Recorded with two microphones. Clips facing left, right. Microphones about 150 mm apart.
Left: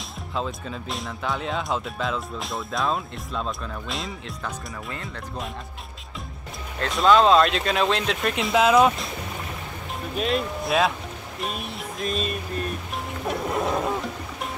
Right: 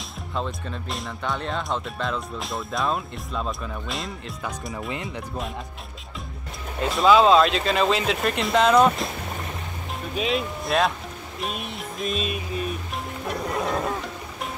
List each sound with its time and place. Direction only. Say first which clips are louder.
0.3 s speech: even; centre (ahead or behind)
4.8 s speech: right 4 dB; 20° right (ahead or behind)
6.8 s speech: right 1 dB; 5° right (ahead or behind)
10.1 s speech: left 1 dB; centre (ahead or behind)
13.6 s insect: even; centre (ahead or behind)